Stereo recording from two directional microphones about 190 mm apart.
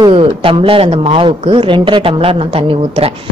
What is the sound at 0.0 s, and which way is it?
A woman's voice, 25° right (ahead or behind).